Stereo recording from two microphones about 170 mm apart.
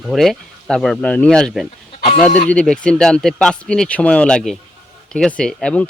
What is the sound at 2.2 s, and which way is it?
Speech, 50° left (ahead or behind).